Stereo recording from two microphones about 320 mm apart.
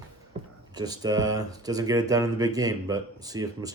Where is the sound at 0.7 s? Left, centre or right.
Centre.